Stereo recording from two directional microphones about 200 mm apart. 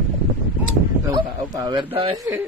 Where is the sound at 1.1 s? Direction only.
20° right (ahead or behind).